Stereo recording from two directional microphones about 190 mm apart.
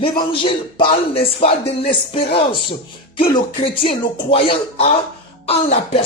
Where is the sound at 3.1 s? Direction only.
25° left (ahead or behind).